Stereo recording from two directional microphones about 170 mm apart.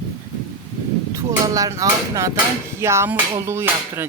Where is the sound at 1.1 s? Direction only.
20° right (ahead or behind).